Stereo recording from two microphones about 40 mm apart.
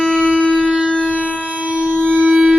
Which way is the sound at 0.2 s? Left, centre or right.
Right.